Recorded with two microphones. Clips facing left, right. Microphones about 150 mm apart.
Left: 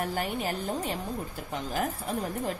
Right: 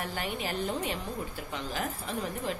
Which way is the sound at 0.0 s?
45° left (ahead or behind).